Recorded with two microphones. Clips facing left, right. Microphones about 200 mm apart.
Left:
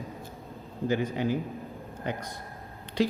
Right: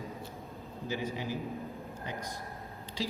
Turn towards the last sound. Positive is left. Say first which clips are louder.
# left 9 dB
turn(degrees=65)  # may be behind; listen again after turning